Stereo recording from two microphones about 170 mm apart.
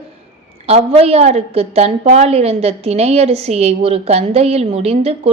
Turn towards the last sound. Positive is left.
turn(degrees=-35)  # may be behind; listen again after turning